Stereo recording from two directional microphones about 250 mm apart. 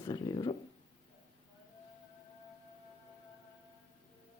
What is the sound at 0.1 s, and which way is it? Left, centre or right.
Speech, centre.